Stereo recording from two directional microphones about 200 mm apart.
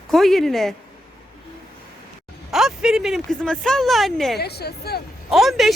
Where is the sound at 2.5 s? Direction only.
Centre (ahead or behind).